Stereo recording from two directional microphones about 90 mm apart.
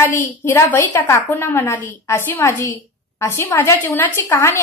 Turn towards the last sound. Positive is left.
turn(degrees=30)  # may be behind; listen again after turning